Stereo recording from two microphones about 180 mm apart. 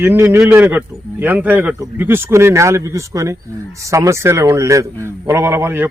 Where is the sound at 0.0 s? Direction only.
10° right (ahead or behind).